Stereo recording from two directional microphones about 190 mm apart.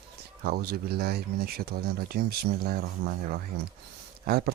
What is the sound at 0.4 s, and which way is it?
Speech, 55° right (ahead or behind).